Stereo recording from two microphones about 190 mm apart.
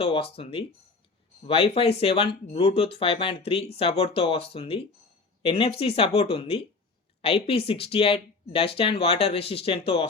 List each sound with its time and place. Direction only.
0.0 s speech: 30° left (ahead or behind)